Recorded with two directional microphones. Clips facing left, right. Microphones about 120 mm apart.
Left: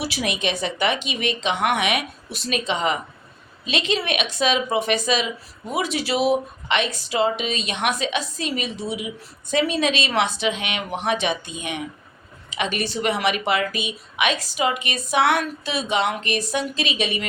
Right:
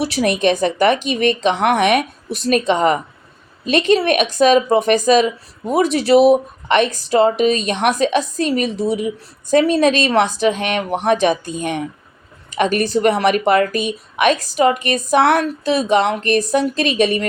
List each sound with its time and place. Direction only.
0.1 s a woman's voice: 45° right (ahead or behind)